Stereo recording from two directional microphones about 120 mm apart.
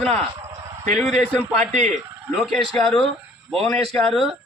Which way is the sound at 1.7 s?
75° right (ahead or behind).